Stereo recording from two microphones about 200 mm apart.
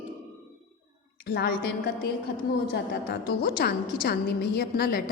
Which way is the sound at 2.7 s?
50° left (ahead or behind).